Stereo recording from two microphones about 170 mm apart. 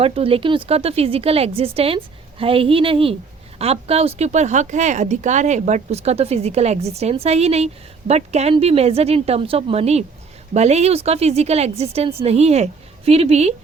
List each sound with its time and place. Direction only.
0.0 s speech: 35° right (ahead or behind)